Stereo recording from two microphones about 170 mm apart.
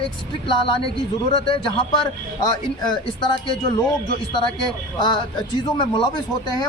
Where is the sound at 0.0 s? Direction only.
30° left (ahead or behind).